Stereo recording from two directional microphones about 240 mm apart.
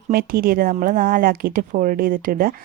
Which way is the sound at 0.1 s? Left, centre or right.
Right.